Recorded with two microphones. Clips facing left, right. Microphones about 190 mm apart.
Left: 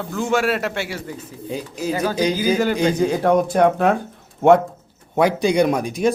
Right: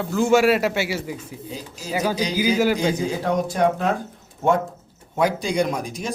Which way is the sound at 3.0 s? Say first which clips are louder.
Left 6 dB; 55° left (ahead or behind).